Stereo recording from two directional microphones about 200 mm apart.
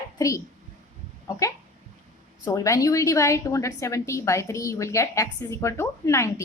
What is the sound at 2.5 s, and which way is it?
A woman's voice, 15° left (ahead or behind).